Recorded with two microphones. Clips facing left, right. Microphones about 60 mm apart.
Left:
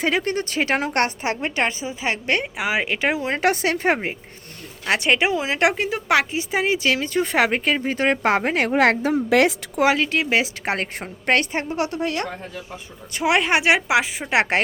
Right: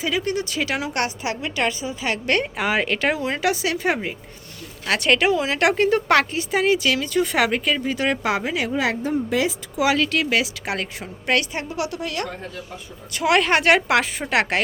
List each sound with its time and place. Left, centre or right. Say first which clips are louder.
0.0 s a woman's voice: left 2 dB; left
3.4 s a woman's voice: left 3 dB; left
4.9 s speech: right 1 dB; left
5.7 s a woman's voice: right 3 dB; centre
6.5 s a woman's voice: right 2 dB; left
9.0 s a woman's voice: left 4 dB; left
9.8 s a woman's voice: left 1 dB; left
13.1 s a woman's voice: right 1 dB; centre